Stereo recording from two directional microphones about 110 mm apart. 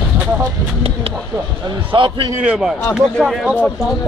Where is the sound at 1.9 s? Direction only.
50° right (ahead or behind).